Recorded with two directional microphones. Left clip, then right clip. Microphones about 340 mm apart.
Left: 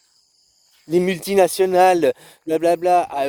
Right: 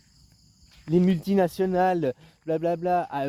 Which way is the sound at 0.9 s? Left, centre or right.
Left.